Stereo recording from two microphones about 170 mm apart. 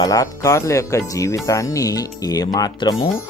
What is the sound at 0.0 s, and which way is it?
Speech, 20° left (ahead or behind).